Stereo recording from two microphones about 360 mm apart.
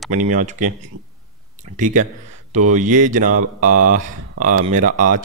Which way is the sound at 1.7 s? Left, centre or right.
Right.